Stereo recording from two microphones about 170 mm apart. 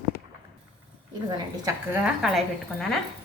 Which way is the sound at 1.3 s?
25° right (ahead or behind).